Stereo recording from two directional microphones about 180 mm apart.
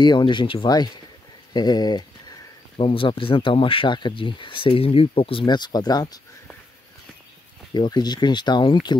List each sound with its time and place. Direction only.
0.0 s speech: 25° left (ahead or behind)
7.7 s speech: 25° left (ahead or behind)